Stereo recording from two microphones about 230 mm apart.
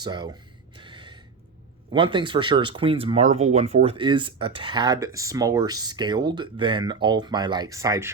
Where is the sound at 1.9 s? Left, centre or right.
Right.